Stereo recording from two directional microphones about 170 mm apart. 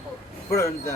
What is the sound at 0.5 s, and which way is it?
Speech, 15° left (ahead or behind).